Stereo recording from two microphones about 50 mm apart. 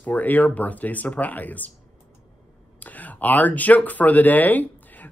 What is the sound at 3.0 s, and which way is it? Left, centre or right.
Speech, left.